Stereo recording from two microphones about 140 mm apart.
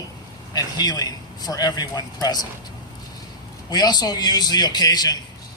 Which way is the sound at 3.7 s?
30° left (ahead or behind).